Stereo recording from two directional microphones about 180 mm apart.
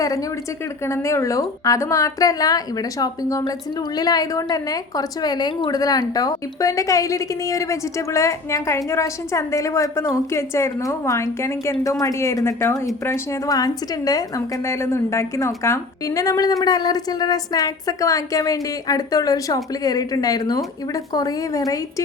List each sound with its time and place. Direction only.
0.9 s a woman's voice: 15° left (ahead or behind)